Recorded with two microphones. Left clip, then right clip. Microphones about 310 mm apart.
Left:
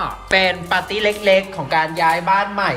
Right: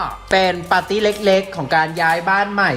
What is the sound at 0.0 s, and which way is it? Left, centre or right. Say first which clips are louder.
Speech: even; centre.